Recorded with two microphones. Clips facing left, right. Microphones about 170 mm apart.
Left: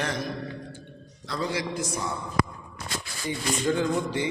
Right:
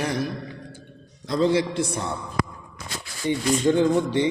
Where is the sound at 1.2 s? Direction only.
25° right (ahead or behind).